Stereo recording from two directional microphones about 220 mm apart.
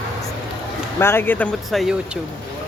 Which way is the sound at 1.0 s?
10° left (ahead or behind).